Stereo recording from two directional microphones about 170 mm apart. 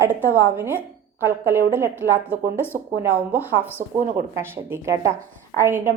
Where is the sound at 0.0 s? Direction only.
15° right (ahead or behind).